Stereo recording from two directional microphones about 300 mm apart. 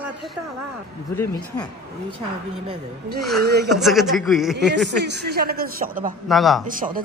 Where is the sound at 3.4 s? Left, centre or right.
Right.